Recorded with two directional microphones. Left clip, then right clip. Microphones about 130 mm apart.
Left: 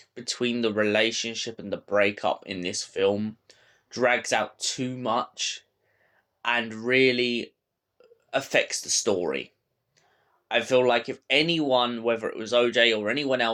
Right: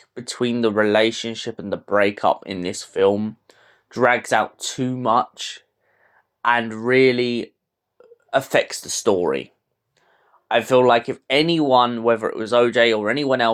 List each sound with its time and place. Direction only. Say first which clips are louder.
0.1 s speech: right 4 dB; 35° right (ahead or behind)
10.5 s speech: right 6 dB; 40° right (ahead or behind)